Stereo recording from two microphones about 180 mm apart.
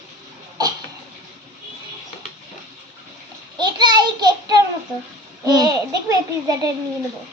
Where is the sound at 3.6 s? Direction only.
25° right (ahead or behind).